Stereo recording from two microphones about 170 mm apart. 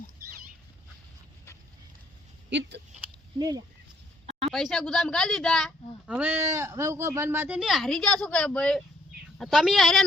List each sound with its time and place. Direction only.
2.5 s speech: 90° right
3.3 s speech: 25° right (ahead or behind)
4.3 s a sound: 35° right (ahead or behind)
4.5 s speech: 5° left (ahead or behind)